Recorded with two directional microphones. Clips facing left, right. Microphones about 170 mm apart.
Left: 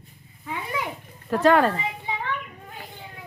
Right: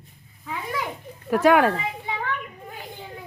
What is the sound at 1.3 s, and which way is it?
Speech, 10° right (ahead or behind).